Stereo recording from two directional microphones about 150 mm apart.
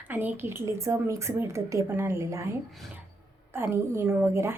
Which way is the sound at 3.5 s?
15° right (ahead or behind).